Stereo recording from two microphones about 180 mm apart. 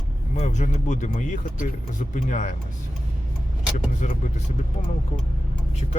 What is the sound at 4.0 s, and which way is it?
Speech, 40° left (ahead or behind).